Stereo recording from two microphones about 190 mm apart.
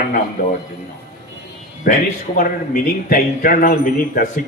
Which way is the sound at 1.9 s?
45° left (ahead or behind).